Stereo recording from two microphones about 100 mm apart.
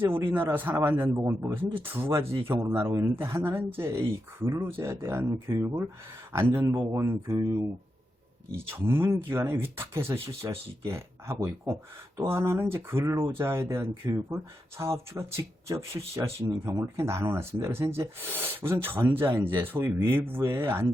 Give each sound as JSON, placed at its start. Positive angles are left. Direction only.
{"t": 0.0, "sound": "speech", "side_deg": -25}
{"t": 7.1, "sound": "speech", "side_deg": -55}
{"t": 8.5, "sound": "speech", "side_deg": -20}